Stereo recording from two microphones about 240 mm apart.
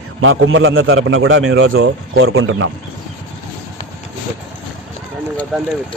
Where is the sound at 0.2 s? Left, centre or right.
Right.